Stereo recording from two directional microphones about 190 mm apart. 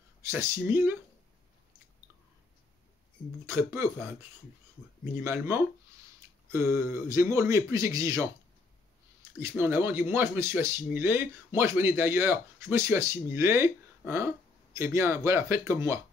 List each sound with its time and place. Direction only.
0.2 s speech: 10° right (ahead or behind)
3.4 s speech: 10° right (ahead or behind)
5.1 s speech: 10° right (ahead or behind)
9.4 s speech: 15° right (ahead or behind)